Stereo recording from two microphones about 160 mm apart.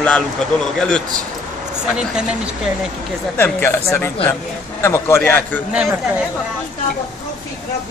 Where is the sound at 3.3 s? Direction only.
15° left (ahead or behind).